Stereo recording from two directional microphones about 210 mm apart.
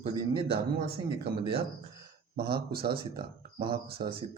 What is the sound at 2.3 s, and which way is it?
Speech, 50° right (ahead or behind).